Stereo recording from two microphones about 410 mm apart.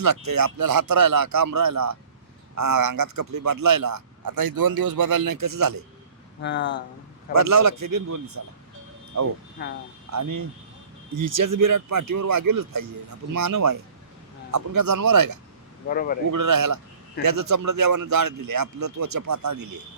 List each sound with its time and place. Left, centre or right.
0.0 s a man's voice: right
6.4 s speech: left
7.3 s a man's voice: right
9.6 s speech: left
10.1 s a man's voice: right
15.9 s speech: left
16.3 s a man's voice: right